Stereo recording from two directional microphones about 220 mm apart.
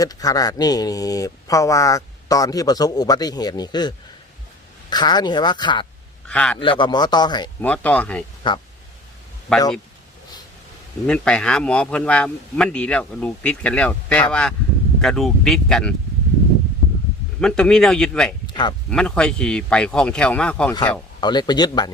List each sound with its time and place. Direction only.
0.0 s speech: 15° left (ahead or behind)
6.2 s a man's voice: 5° left (ahead or behind)
6.6 s speech: 20° left (ahead or behind)
7.6 s a man's voice: 5° left (ahead or behind)
9.5 s a man's voice: 5° left (ahead or behind)
11.0 s a man's voice: 5° left (ahead or behind)
17.4 s a man's voice: 5° left (ahead or behind)
18.4 s a sound: 20° left (ahead or behind)
18.9 s a man's voice: 5° left (ahead or behind)
21.2 s speech: 20° left (ahead or behind)